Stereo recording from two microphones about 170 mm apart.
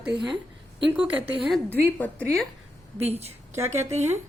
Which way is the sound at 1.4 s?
Centre (ahead or behind).